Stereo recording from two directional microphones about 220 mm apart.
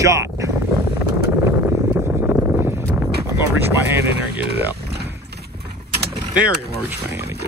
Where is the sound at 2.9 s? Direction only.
10° right (ahead or behind).